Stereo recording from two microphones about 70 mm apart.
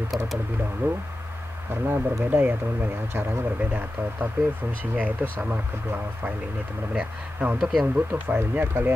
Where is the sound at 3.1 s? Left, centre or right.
Right.